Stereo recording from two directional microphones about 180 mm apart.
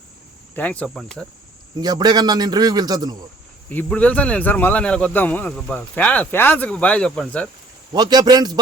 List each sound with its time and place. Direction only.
0.5 s speech: 10° left (ahead or behind)
1.8 s a man's voice: 20° right (ahead or behind)
3.7 s speech: 10° left (ahead or behind)
7.9 s a man's voice: 25° right (ahead or behind)